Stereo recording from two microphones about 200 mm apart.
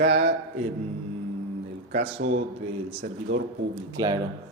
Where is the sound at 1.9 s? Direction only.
30° right (ahead or behind).